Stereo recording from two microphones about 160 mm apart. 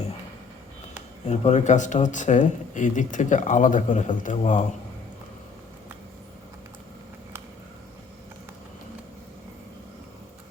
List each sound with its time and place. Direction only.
1.3 s speech: 45° left (ahead or behind)